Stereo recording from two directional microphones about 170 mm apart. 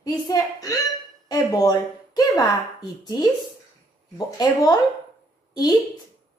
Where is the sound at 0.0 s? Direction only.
20° left (ahead or behind).